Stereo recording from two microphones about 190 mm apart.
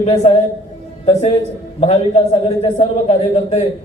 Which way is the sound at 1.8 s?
30° left (ahead or behind).